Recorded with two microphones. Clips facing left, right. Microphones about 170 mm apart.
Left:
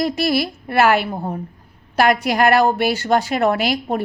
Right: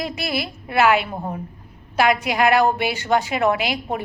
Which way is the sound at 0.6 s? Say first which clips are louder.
Left 1 dB; 35° left (ahead or behind).